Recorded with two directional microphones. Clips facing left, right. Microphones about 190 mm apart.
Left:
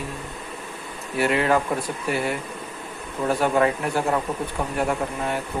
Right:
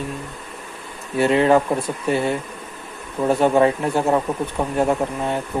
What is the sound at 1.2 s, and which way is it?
Speech, 25° right (ahead or behind).